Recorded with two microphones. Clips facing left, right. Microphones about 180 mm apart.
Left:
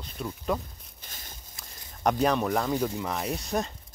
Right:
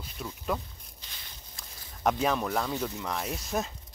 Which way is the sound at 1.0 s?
45° left (ahead or behind).